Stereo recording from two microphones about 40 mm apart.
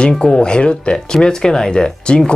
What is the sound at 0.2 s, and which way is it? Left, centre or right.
Speech, left.